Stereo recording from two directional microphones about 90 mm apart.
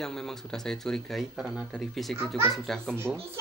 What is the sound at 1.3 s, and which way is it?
Speech, 5° right (ahead or behind).